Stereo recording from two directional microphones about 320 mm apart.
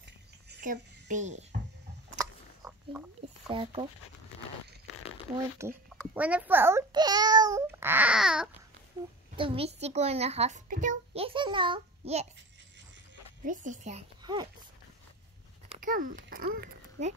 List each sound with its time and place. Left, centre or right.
0.0 s a sound: right
2.6 s a sound: centre
3.4 s speech: centre
5.6 s a child's voice: centre
9.4 s a child's voice: centre
13.5 s a child's voice: right
15.7 s babbling: right